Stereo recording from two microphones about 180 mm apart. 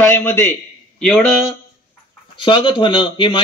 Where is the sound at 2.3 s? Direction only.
30° left (ahead or behind).